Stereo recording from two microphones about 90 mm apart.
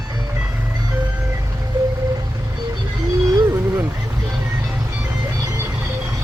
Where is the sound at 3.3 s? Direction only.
30° right (ahead or behind).